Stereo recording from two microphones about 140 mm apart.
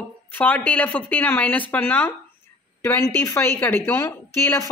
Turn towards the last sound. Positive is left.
turn(degrees=20)  # may be behind; listen again after turning